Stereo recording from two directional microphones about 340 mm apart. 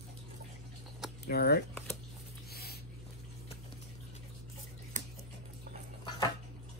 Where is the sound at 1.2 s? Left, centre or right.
Left.